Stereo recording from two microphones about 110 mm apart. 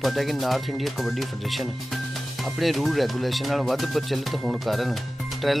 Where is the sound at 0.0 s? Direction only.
Centre (ahead or behind).